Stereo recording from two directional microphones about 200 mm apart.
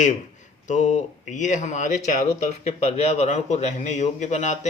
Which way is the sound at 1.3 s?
40° left (ahead or behind).